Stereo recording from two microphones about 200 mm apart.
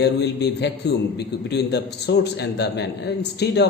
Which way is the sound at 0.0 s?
55° left (ahead or behind).